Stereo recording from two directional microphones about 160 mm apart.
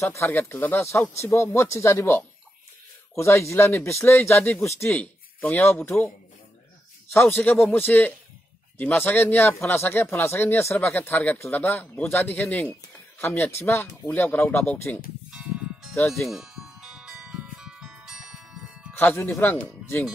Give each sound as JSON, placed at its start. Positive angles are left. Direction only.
{"t": 0.0, "sound": "speech", "side_deg": 15}
{"t": 7.1, "sound": "speech", "side_deg": 15}
{"t": 16.3, "sound": "music", "side_deg": -5}
{"t": 18.9, "sound": "speech", "side_deg": 15}